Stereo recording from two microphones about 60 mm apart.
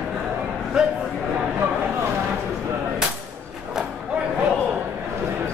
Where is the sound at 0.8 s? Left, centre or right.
Centre.